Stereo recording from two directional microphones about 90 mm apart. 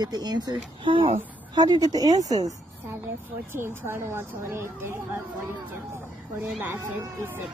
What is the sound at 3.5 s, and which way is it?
Speech, 25° right (ahead or behind).